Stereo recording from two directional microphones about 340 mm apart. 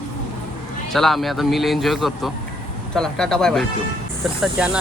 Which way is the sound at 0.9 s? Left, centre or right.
Centre.